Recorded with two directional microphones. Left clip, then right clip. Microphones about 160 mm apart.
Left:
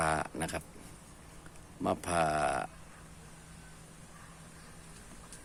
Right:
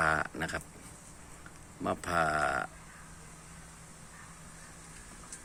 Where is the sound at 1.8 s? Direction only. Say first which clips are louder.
Even; 20° left (ahead or behind).